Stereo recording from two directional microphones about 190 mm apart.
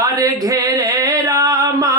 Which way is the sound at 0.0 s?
20° right (ahead or behind).